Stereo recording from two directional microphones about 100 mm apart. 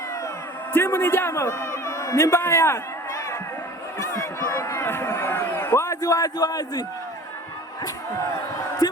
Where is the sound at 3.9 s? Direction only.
30° left (ahead or behind).